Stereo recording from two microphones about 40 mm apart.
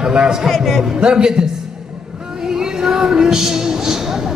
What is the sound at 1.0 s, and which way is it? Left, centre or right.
Speech, right.